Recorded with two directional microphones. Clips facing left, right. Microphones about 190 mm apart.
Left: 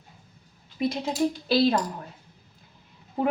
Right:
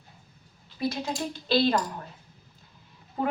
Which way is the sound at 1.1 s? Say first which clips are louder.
Left 4 dB; 5° left (ahead or behind).